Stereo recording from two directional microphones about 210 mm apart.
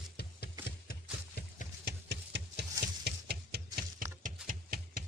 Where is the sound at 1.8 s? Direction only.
55° right (ahead or behind).